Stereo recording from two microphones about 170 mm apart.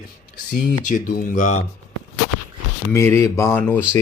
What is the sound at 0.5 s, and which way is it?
Speech, 50° left (ahead or behind).